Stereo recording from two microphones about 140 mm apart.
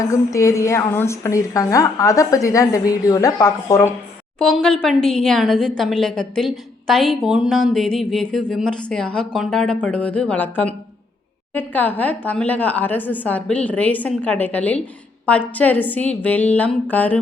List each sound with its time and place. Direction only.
0.1 s a woman's voice: 20° left (ahead or behind)
4.4 s a woman's voice: 5° left (ahead or behind)